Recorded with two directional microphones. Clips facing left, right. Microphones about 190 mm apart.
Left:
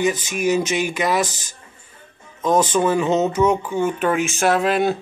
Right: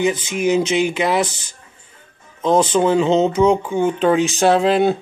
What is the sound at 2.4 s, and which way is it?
Speech, 25° right (ahead or behind).